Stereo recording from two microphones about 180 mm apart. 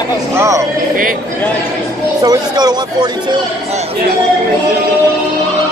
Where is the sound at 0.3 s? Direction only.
15° right (ahead or behind).